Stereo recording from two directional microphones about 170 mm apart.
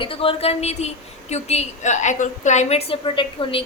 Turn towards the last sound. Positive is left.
turn(degrees=30)  # may be behind; listen again after turning